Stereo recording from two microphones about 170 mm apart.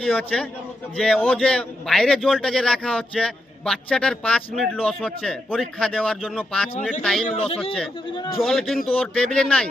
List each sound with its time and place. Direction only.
0.0 s a man's voice: 5° left (ahead or behind)
7.3 s speech: 35° left (ahead or behind)
8.4 s a man's voice: centre (ahead or behind)